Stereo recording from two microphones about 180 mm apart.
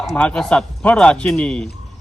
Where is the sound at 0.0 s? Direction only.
5° left (ahead or behind).